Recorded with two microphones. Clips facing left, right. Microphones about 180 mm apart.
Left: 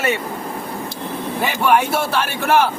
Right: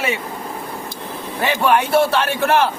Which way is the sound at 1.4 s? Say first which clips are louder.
Even; 5° left (ahead or behind).